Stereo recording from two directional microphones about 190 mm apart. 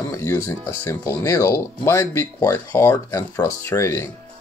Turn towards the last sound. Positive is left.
turn(degrees=15)  # may be behind; listen again after turning